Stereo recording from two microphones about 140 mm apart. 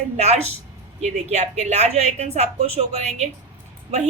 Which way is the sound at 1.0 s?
50° right (ahead or behind).